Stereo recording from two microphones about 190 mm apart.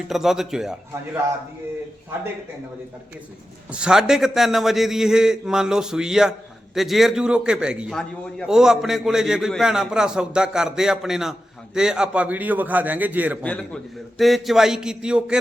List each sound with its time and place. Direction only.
0.1 s a man's voice: centre (ahead or behind)
3.7 s a man's voice: 5° right (ahead or behind)
13.4 s a man's voice: 5° left (ahead or behind)